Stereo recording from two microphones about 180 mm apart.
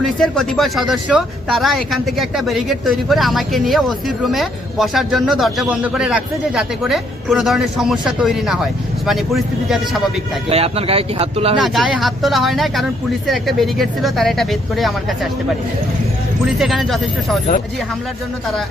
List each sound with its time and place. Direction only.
0.0 s speech: centre (ahead or behind)
10.5 s speech: 35° right (ahead or behind)
11.6 s speech: centre (ahead or behind)
16.6 s speech: centre (ahead or behind)